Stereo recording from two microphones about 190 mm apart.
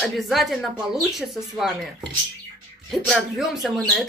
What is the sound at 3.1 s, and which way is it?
Speech, centre (ahead or behind).